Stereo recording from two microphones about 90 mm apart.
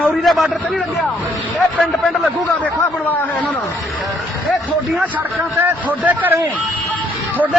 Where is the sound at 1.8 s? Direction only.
5° left (ahead or behind).